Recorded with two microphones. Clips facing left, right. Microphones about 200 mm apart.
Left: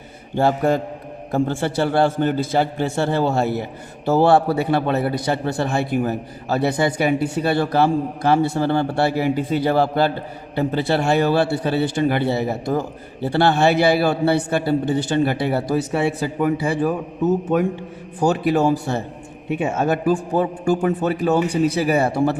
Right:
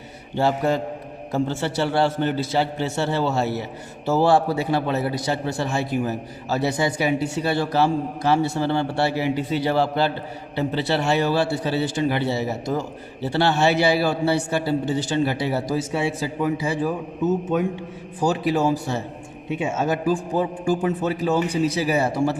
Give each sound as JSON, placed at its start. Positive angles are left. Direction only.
{"t": 0.3, "sound": "a man's voice", "side_deg": 50}